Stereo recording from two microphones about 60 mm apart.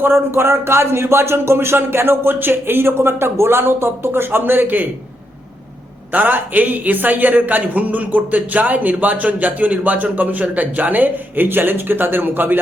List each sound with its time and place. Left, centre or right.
0.0 s speech: right
6.1 s a man's voice: right